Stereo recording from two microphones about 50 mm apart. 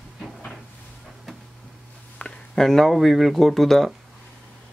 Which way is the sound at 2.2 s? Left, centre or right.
Left.